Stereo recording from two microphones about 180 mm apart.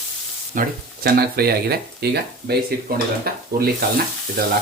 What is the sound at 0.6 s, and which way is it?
Speech, 60° right (ahead or behind).